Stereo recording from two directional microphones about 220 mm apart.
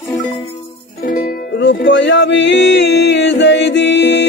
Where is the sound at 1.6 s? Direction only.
55° left (ahead or behind).